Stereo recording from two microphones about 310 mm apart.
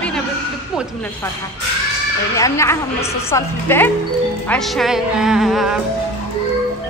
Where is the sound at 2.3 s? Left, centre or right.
Centre.